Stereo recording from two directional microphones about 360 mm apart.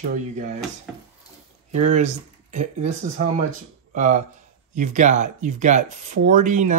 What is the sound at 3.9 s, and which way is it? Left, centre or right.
Speech, right.